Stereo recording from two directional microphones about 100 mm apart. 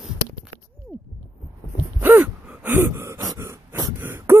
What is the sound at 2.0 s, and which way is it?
Gasp, 20° right (ahead or behind).